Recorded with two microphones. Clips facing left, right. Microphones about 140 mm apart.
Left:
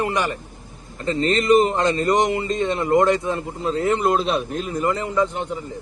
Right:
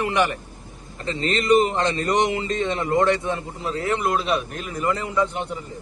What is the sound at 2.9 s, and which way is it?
Speech, 25° left (ahead or behind).